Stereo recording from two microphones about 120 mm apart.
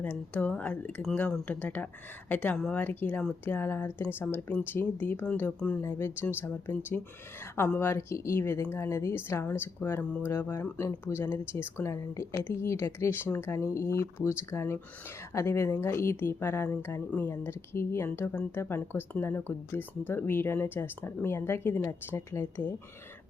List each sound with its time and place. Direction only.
0.0 s speech: 10° left (ahead or behind)